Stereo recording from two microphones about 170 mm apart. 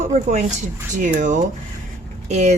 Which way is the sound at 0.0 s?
45° right (ahead or behind).